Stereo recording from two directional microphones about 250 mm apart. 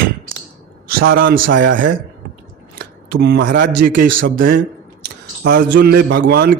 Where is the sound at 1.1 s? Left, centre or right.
Right.